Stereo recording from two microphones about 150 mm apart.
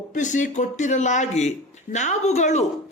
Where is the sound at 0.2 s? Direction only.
55° left (ahead or behind).